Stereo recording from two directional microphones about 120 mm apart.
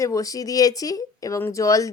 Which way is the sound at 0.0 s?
30° left (ahead or behind).